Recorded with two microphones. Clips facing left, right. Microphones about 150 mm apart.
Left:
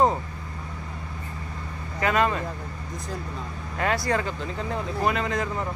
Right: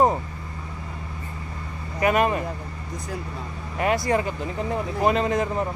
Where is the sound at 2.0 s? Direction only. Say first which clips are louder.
Right 3 dB; 20° right (ahead or behind).